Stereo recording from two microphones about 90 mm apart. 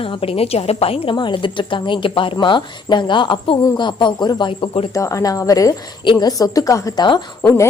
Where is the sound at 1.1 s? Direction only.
65° left (ahead or behind).